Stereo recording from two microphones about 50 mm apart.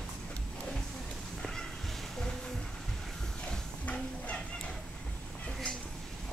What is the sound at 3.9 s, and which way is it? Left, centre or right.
Fowl, left.